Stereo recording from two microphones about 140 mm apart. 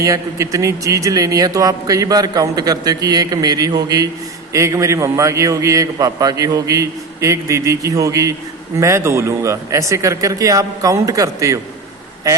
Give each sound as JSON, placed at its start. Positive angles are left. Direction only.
{"t": 0.0, "sound": "a man's voice", "side_deg": -25}